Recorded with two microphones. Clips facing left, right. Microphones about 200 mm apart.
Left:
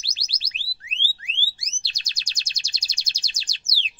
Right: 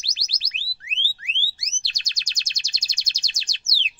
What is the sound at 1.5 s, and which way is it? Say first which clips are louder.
Chirp: right 1 dB; 30° left (ahead or behind).